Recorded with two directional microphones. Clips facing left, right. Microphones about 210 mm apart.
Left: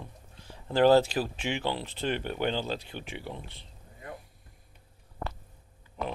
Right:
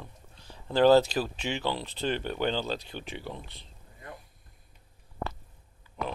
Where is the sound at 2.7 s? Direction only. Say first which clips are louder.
Right 1 dB; 35° right (ahead or behind).